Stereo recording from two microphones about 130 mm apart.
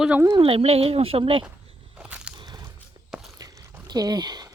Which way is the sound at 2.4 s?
30° right (ahead or behind).